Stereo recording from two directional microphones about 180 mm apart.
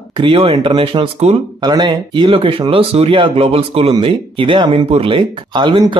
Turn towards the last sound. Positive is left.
turn(degrees=-25)  # may be behind; listen again after turning